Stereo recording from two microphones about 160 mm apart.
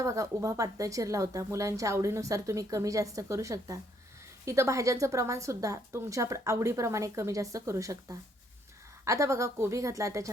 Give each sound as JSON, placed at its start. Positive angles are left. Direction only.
{"t": 0.0, "sound": "a woman's voice", "side_deg": -20}